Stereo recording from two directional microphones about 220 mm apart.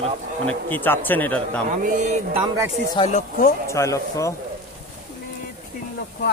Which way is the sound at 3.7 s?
15° left (ahead or behind).